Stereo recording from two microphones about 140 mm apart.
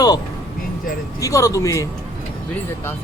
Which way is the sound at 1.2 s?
25° left (ahead or behind).